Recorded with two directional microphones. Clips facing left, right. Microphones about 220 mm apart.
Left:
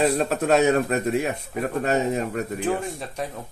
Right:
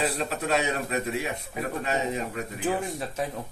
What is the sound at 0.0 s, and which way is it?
Speech, 50° left (ahead or behind).